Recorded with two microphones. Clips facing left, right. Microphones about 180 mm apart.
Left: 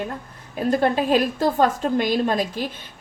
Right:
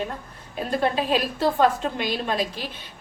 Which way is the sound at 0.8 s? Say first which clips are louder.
Left 3 dB; 45° left (ahead or behind).